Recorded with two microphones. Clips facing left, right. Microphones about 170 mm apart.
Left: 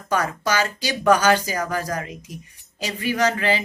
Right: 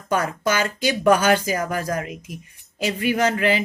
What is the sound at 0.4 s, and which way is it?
Speech, 50° right (ahead or behind).